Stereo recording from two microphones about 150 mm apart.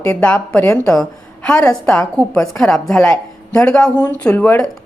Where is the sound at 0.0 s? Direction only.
10° left (ahead or behind).